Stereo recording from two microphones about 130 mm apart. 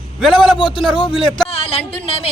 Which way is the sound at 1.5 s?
50° left (ahead or behind).